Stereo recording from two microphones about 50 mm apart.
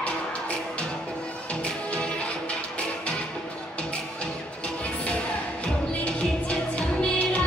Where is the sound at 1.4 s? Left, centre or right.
Left.